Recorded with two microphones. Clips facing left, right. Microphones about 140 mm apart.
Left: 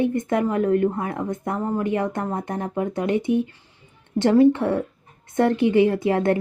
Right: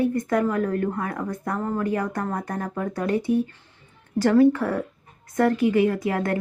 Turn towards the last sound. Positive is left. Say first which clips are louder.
# left 4 dB
turn(degrees=25)  # may be behind; listen again after turning